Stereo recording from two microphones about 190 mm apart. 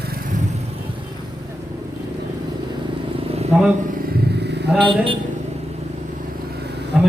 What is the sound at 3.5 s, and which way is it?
Speech, centre (ahead or behind).